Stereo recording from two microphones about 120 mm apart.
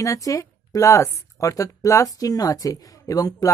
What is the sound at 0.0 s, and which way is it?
A woman's voice, 30° left (ahead or behind).